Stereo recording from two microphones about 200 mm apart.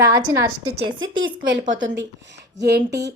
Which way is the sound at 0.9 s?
70° right (ahead or behind).